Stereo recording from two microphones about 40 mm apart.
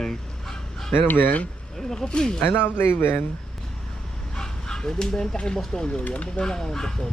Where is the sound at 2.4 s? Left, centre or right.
Left.